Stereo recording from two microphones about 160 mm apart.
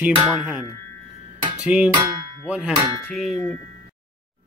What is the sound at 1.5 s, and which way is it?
Music, 5° right (ahead or behind).